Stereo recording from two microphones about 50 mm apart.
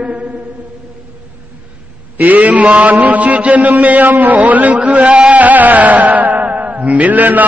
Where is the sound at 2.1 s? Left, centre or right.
Right.